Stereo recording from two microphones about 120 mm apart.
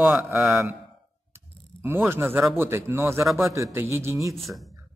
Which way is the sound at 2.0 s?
20° right (ahead or behind).